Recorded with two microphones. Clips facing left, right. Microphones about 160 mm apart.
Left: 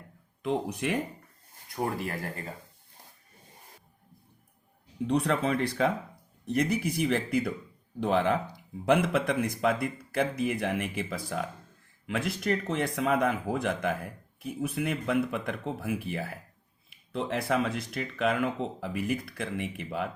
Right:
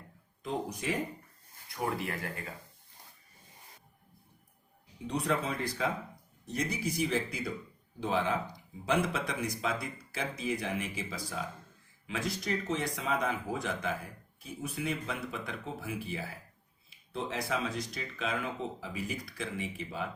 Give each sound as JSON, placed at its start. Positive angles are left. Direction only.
{"t": 0.4, "sound": "speech", "side_deg": 65}
{"t": 1.7, "sound": "speech", "side_deg": 40}
{"t": 5.0, "sound": "speech", "side_deg": 65}